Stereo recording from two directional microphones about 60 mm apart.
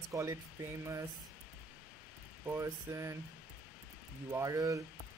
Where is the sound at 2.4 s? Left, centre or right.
Right.